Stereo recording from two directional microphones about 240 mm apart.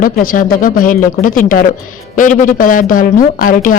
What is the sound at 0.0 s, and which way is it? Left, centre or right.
Speech, left.